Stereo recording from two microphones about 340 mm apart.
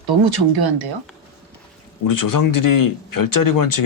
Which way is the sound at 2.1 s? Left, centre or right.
Left.